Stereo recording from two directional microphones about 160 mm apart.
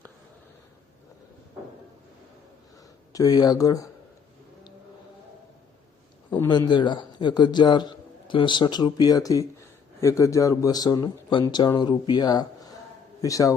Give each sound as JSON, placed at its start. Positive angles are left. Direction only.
{"t": 3.1, "sound": "a man's voice", "side_deg": 25}
{"t": 6.5, "sound": "a man's voice", "side_deg": 25}